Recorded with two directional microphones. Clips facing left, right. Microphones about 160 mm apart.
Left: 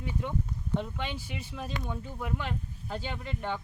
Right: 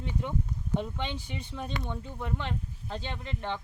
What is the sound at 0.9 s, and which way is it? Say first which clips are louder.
Speech: right 1 dB; 10° left (ahead or behind).